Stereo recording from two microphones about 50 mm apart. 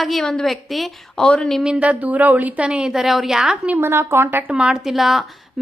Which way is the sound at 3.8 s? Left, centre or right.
Right.